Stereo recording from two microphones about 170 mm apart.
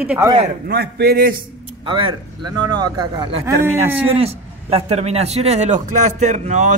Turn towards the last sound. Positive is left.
turn(degrees=-45)  # may be behind; listen again after turning